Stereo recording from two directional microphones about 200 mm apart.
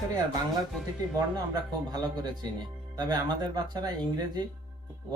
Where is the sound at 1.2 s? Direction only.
20° right (ahead or behind).